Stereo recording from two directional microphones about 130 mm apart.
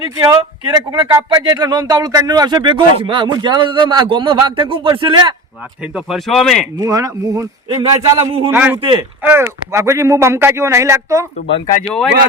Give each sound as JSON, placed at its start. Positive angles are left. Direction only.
{"t": 0.0, "sound": "speech", "side_deg": -35}
{"t": 5.8, "sound": "speech", "side_deg": -5}
{"t": 6.7, "sound": "speech", "side_deg": -25}
{"t": 7.8, "sound": "speech", "side_deg": -40}
{"t": 8.4, "sound": "speech", "side_deg": -15}
{"t": 8.8, "sound": "speech", "side_deg": -40}
{"t": 9.2, "sound": "speech", "side_deg": -15}